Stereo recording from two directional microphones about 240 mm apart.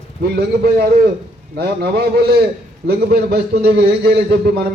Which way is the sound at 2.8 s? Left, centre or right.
Right.